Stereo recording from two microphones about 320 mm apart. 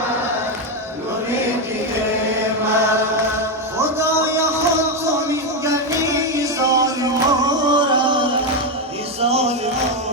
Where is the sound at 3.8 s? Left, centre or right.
Centre.